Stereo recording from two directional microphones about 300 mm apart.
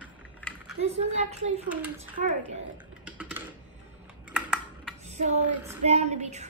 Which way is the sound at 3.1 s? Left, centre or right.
Centre.